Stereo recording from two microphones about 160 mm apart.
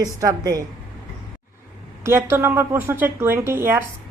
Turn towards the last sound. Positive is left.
turn(degrees=-15)  # may be behind; listen again after turning